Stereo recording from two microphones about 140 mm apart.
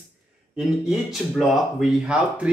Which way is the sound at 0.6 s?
Centre (ahead or behind).